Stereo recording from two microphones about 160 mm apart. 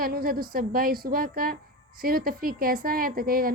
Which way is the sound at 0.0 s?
65° right (ahead or behind).